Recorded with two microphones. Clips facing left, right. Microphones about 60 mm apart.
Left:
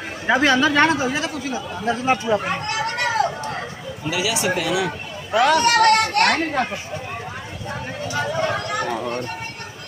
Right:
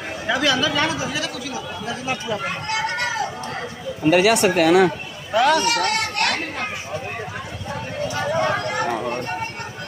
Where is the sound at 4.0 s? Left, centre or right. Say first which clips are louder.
Right 8 dB; right.